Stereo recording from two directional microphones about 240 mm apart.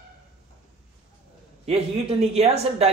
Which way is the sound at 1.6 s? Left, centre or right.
Right.